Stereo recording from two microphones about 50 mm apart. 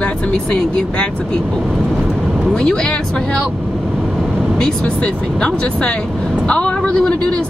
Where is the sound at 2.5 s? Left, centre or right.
Centre.